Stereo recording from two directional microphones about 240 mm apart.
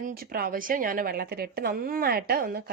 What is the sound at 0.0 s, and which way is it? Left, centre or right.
A woman's voice, right.